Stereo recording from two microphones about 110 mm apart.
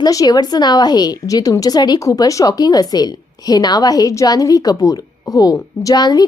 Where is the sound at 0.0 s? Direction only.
35° left (ahead or behind).